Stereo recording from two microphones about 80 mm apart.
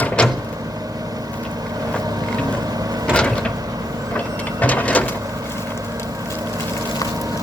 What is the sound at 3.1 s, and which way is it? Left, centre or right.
Mechanisms, centre.